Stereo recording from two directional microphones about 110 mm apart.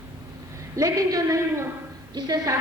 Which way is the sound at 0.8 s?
30° right (ahead or behind).